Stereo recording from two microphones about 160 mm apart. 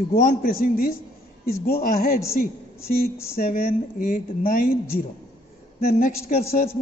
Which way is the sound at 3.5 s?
60° left (ahead or behind).